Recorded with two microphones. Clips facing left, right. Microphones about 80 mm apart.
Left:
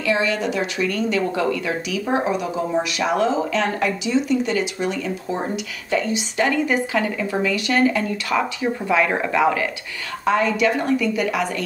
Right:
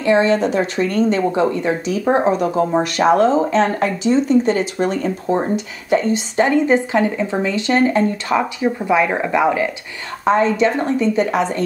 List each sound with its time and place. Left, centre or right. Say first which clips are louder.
0.0 s speech: right 6 dB; right
8.4 s speech: right 1 dB; centre